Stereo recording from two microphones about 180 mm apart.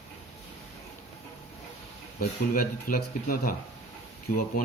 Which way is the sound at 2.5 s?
55° left (ahead or behind).